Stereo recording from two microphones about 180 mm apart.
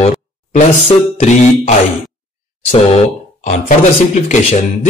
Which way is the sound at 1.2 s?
40° left (ahead or behind).